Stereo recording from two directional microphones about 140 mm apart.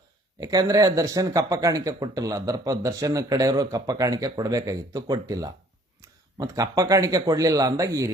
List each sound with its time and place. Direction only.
0.3 s speech: 25° right (ahead or behind)